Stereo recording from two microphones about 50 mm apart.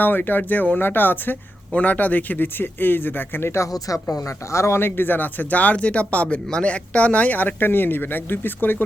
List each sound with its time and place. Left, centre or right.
0.0 s speech: left
1.7 s speech: left
4.2 s speech: left
4.8 s speech: left